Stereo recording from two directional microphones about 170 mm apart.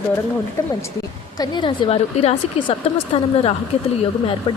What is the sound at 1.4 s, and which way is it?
A woman's voice, 25° left (ahead or behind).